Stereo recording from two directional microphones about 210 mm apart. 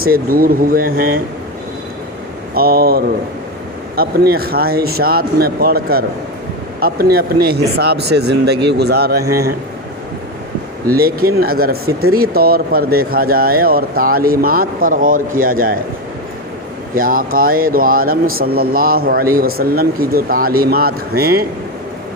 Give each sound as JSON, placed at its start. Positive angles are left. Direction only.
{"t": 0.0, "sound": "speech", "side_deg": -45}
{"t": 2.6, "sound": "speech", "side_deg": -45}
{"t": 10.9, "sound": "speech", "side_deg": -45}
{"t": 16.9, "sound": "speech", "side_deg": -40}